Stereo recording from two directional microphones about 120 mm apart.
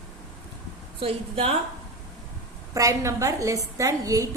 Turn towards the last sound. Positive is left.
turn(degrees=-30)  # may be behind; listen again after turning